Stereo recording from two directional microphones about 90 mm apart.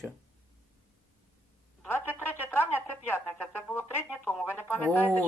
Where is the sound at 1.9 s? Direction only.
20° left (ahead or behind).